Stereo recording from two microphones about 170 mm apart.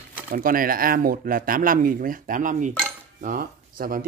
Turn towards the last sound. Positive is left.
turn(degrees=-60)  # may be behind; listen again after turning